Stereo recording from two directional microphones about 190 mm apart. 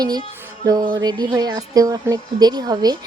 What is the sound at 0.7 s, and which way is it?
Speech, 20° right (ahead or behind).